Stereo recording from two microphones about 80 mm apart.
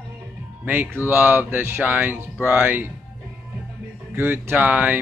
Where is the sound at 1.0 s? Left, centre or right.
Right.